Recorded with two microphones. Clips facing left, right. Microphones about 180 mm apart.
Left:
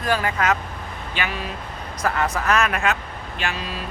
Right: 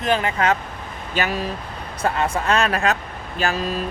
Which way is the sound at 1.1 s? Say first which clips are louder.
Right 5 dB; 40° right (ahead or behind).